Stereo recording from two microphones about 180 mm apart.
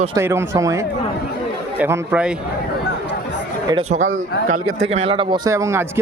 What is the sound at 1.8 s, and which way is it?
Speech, 10° right (ahead or behind).